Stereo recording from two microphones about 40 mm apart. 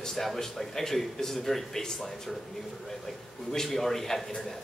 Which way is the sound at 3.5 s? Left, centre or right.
Centre.